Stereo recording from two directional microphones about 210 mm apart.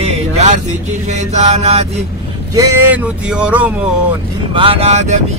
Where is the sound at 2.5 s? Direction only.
5° right (ahead or behind).